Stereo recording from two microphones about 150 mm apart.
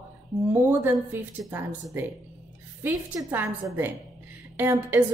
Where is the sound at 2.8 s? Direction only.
15° right (ahead or behind).